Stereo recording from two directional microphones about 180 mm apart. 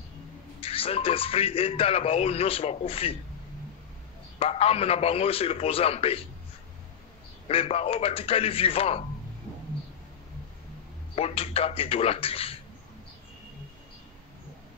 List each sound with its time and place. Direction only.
0.6 s speech: 30° left (ahead or behind)
4.4 s speech: 35° left (ahead or behind)
7.4 s speech: 35° left (ahead or behind)
11.1 s speech: 35° left (ahead or behind)